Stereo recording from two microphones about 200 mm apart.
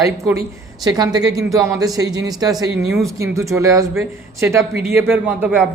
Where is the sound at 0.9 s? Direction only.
20° right (ahead or behind).